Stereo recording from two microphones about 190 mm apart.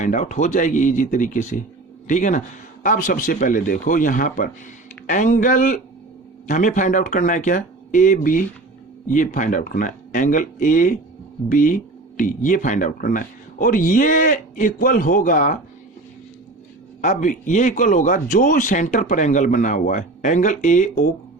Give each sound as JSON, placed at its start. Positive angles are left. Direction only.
{"t": 0.0, "sound": "speech", "side_deg": 40}
{"t": 17.0, "sound": "speech", "side_deg": 40}